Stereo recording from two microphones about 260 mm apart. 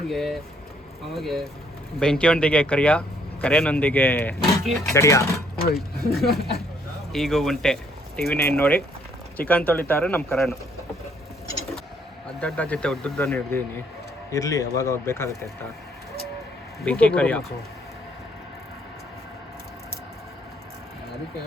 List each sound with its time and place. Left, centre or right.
0.1 s speech: centre
5.5 s speech: left
6.1 s speech: centre
12.4 s speech: centre
16.8 s speech: centre